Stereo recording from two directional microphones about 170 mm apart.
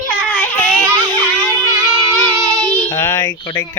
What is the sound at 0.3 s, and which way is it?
Baby cry, 10° left (ahead or behind).